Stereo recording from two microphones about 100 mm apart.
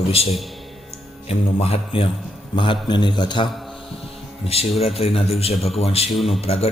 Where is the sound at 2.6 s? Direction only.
55° left (ahead or behind).